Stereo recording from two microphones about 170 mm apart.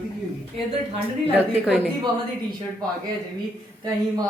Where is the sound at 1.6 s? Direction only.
5° right (ahead or behind).